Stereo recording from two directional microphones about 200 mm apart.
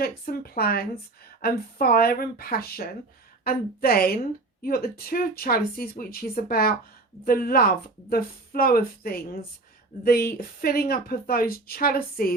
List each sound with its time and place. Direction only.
0.0 s a woman's voice: 50° left (ahead or behind)